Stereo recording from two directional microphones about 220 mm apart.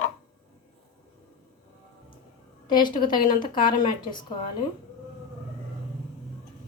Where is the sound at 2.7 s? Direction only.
20° left (ahead or behind).